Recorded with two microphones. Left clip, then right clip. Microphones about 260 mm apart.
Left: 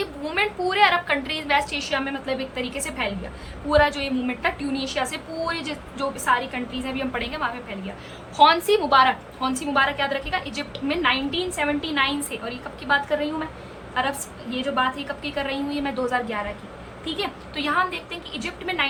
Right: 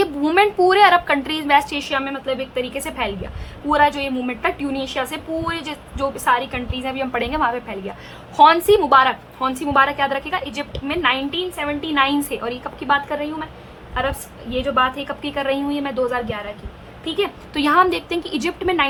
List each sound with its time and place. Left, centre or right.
0.0 s a woman's voice: centre
14.5 s a woman's voice: centre